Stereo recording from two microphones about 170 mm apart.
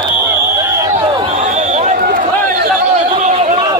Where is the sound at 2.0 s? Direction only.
55° right (ahead or behind).